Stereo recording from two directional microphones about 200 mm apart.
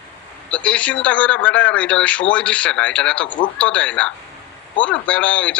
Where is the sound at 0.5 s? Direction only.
5° left (ahead or behind).